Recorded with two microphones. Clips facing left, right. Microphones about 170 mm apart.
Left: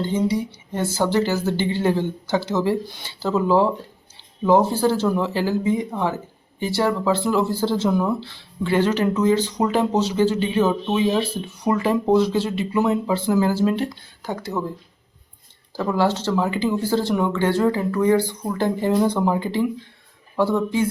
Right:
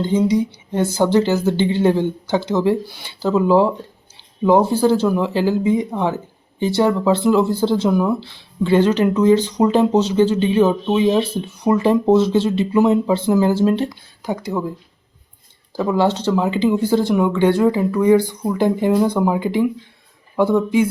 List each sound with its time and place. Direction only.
0.0 s speech: 15° right (ahead or behind)
14.3 s speech: 10° right (ahead or behind)
15.7 s speech: 15° right (ahead or behind)